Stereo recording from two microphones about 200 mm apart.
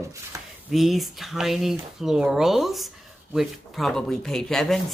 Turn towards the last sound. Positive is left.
turn(degrees=0)  # may be behind; listen again after turning